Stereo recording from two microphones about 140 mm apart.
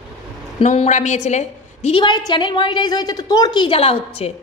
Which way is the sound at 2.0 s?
35° left (ahead or behind).